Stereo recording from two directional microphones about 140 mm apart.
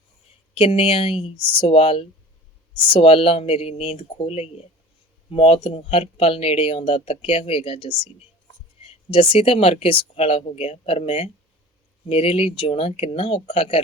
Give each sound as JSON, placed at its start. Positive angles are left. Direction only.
{"t": 0.5, "sound": "speech", "side_deg": 40}